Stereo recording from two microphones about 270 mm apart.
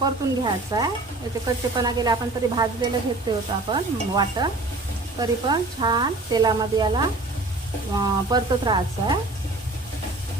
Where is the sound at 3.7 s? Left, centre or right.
Centre.